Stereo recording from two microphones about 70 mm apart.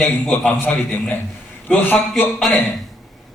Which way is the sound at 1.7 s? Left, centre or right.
Centre.